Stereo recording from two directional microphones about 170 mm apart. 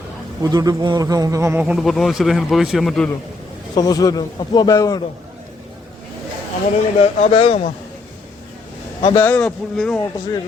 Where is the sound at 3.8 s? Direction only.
20° left (ahead or behind).